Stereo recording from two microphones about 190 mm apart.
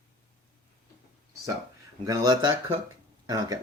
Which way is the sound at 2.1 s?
20° right (ahead or behind).